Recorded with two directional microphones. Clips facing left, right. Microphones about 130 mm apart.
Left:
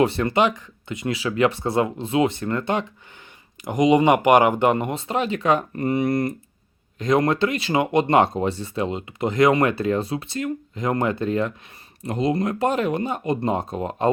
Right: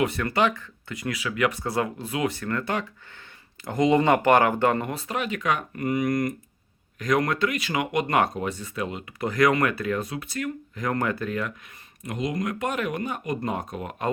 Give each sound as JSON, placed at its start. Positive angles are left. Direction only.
{"t": 0.0, "sound": "speech", "side_deg": 25}